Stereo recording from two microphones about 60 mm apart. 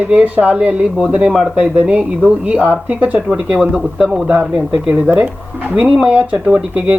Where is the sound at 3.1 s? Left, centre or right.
Centre.